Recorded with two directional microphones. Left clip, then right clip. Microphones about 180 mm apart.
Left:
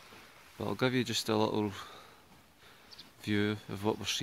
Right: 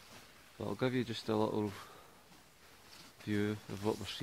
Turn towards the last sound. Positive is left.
turn(degrees=15)  # may be behind; listen again after turning